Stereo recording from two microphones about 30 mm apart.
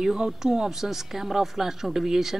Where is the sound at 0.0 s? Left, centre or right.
Right.